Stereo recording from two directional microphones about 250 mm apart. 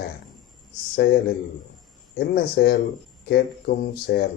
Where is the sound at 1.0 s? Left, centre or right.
Left.